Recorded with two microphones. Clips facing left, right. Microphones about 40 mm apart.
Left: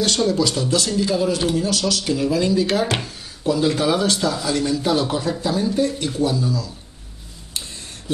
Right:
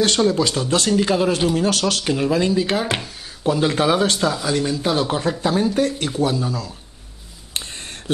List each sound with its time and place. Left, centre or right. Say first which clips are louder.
0.0 s a man's voice: right 2 dB; right
2.8 s speech: left 2 dB; centre
3.4 s a man's voice: right 1 dB; right
4.3 s a man's voice: even; right